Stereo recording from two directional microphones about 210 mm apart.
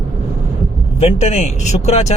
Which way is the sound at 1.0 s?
30° left (ahead or behind).